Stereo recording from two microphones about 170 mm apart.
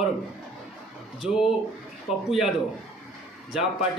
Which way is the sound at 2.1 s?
35° left (ahead or behind).